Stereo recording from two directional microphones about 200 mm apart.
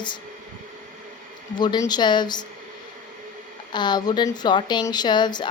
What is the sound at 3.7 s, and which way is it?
Speech, 20° left (ahead or behind).